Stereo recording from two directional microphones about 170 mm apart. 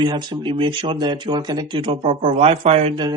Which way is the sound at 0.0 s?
25° right (ahead or behind).